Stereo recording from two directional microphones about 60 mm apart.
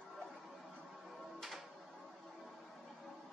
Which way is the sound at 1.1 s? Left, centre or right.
Centre.